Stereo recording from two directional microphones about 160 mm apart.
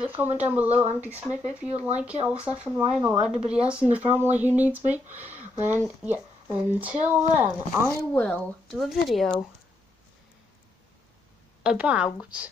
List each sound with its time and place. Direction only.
0.0 s speech: 10° right (ahead or behind)
1.7 s speech: 40° right (ahead or behind)
2.0 s speech: 10° right (ahead or behind)
8.0 s speech: 10° left (ahead or behind)
11.6 s speech: 5° right (ahead or behind)